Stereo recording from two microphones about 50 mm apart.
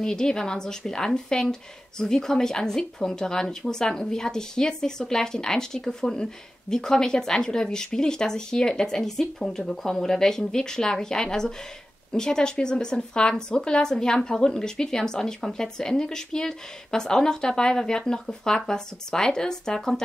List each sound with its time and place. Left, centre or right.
0.0 s speech: centre